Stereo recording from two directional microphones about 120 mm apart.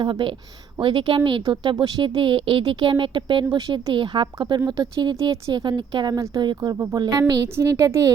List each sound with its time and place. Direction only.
0.0 s speech: 40° right (ahead or behind)
6.1 s a woman's voice: 25° right (ahead or behind)
6.4 s a woman's voice: 35° right (ahead or behind)